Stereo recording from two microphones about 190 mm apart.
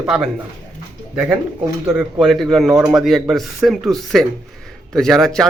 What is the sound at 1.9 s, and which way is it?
Speech, 5° right (ahead or behind).